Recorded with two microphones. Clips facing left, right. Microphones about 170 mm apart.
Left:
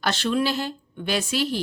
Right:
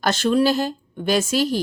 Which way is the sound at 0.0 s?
45° right (ahead or behind).